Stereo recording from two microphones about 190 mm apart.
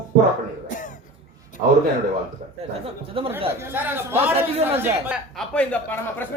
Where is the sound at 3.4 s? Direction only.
10° right (ahead or behind).